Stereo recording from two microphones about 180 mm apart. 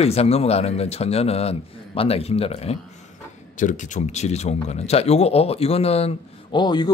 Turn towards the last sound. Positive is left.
turn(degrees=25)  # may be behind; listen again after turning